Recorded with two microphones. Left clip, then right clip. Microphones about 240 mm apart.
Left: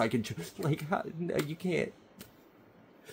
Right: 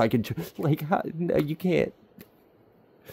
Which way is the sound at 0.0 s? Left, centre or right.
Right.